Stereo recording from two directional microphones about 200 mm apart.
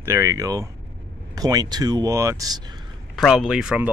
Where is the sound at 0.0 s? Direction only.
15° right (ahead or behind).